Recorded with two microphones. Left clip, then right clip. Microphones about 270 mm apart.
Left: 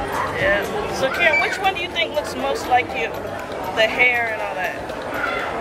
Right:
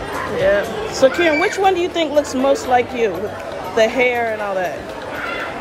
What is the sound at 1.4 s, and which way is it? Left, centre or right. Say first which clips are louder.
Speech: right 5 dB; right.